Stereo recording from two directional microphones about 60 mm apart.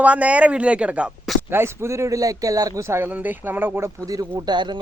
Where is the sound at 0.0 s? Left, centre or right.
Right.